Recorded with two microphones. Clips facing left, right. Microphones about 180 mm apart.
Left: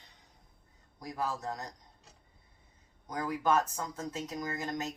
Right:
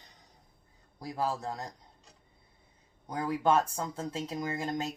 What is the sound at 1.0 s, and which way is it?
Speech, 30° right (ahead or behind).